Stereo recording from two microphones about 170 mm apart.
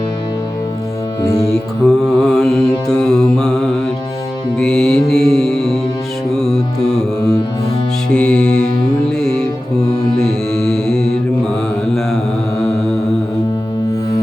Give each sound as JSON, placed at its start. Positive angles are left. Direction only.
{"t": 1.2, "sound": "music", "side_deg": 20}
{"t": 1.8, "sound": "mantra", "side_deg": 5}
{"t": 4.5, "sound": "music", "side_deg": 5}
{"t": 6.3, "sound": "mantra", "side_deg": 0}
{"t": 8.1, "sound": "music", "side_deg": 5}